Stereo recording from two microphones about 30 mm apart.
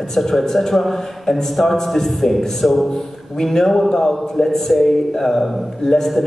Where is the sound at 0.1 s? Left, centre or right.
Centre.